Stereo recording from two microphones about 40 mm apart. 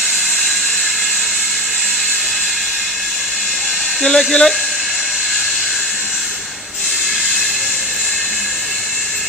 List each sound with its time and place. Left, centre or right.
4.0 s speech: centre